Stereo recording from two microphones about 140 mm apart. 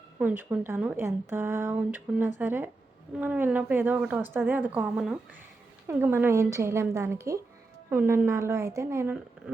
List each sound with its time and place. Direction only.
0.2 s a woman's voice: 10° right (ahead or behind)